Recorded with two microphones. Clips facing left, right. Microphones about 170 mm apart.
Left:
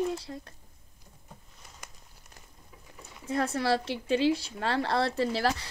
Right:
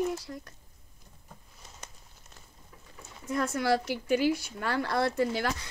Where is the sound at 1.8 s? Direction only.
25° right (ahead or behind).